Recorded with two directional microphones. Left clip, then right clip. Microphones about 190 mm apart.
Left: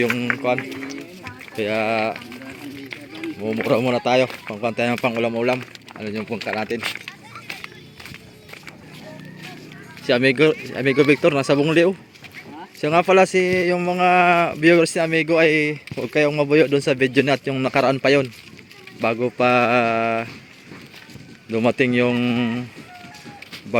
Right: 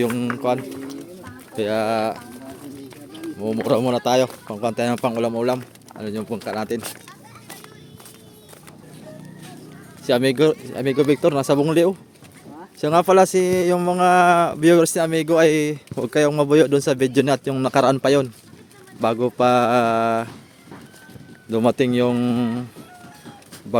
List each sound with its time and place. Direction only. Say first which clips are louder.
0.4 s speech: even; 15° right (ahead or behind)
3.4 s speech: even; 20° right (ahead or behind)
3.7 s speech: even; 5° right (ahead or behind)
10.1 s speech: left 1 dB; 5° right (ahead or behind)
21.5 s speech: even; 10° right (ahead or behind)